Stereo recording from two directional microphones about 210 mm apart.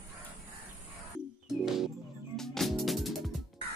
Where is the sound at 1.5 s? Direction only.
Centre (ahead or behind).